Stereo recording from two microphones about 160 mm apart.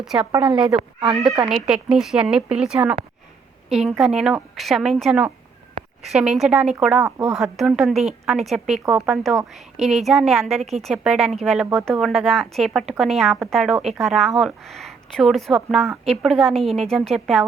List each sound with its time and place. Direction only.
0.0 s speech: 5° right (ahead or behind)
0.3 s a woman's voice: 30° right (ahead or behind)
0.5 s speech: 5° right (ahead or behind)
7.0 s speech: 15° right (ahead or behind)
7.3 s speech: centre (ahead or behind)